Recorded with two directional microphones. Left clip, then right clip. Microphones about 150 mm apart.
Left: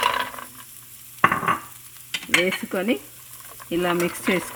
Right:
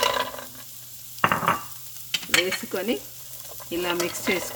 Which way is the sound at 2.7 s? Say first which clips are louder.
Left 3 dB; 40° left (ahead or behind).